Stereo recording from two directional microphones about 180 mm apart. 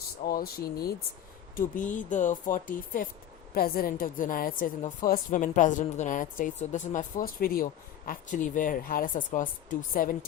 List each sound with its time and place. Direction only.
0.3 s a woman's voice: 55° left (ahead or behind)